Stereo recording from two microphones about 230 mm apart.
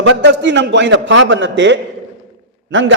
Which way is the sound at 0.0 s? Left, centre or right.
Right.